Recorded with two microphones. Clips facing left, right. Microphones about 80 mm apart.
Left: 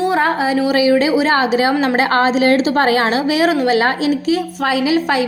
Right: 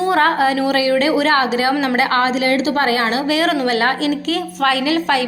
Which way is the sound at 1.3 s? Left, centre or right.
Left.